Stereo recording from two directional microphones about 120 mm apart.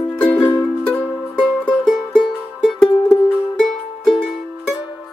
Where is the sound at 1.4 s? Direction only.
5° right (ahead or behind).